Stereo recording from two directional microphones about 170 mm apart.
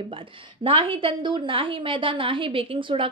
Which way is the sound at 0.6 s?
35° right (ahead or behind).